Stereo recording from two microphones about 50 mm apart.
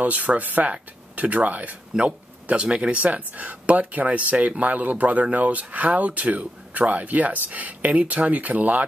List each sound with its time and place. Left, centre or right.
0.0 s speech: right